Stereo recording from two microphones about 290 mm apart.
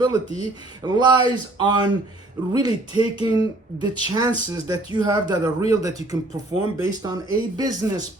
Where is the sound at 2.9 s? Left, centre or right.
Centre.